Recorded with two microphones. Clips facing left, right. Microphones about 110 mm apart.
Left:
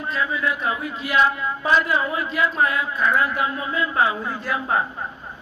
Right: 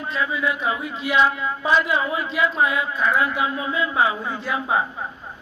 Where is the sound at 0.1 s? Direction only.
5° right (ahead or behind).